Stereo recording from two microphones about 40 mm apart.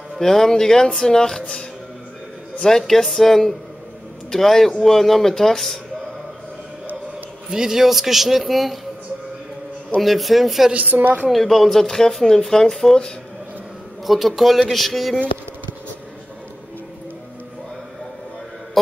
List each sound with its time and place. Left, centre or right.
0.2 s speech: centre
2.8 s a man's voice: centre
7.5 s a man's voice: centre
9.9 s a man's voice: centre
10.7 s a woman's voice: right
11.3 s speech: centre
14.0 s a man's voice: centre